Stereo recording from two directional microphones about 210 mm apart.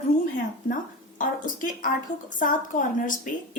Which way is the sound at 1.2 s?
40° left (ahead or behind).